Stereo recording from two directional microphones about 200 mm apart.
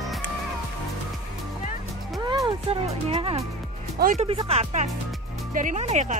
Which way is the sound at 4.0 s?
45° right (ahead or behind).